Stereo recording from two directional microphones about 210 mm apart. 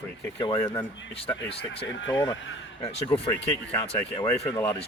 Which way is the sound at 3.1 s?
25° left (ahead or behind).